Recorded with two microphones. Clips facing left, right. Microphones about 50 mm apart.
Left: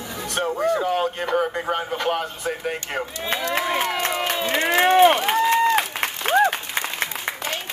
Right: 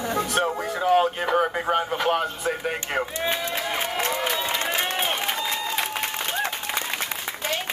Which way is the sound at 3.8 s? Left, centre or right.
Left.